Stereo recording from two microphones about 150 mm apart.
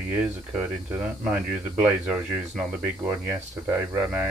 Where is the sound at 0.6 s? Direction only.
10° right (ahead or behind).